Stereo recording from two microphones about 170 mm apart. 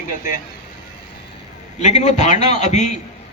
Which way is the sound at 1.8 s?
40° left (ahead or behind).